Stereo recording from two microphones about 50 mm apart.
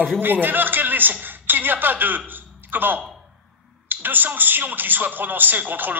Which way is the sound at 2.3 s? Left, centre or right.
Right.